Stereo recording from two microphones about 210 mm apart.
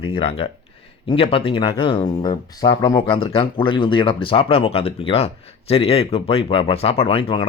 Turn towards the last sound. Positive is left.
turn(degrees=25)  # may be behind; listen again after turning